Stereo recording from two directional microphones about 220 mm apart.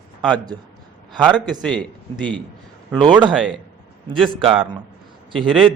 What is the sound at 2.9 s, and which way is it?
Speech, 20° right (ahead or behind).